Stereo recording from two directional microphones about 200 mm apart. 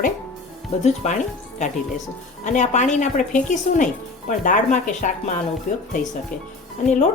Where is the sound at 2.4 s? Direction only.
35° left (ahead or behind).